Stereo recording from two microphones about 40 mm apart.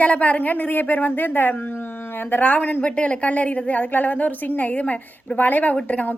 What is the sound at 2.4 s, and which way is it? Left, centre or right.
A woman's voice, left.